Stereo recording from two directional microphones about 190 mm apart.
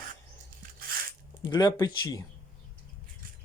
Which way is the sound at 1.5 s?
25° left (ahead or behind).